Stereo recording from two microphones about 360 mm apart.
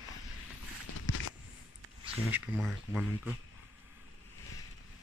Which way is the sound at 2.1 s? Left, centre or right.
Centre.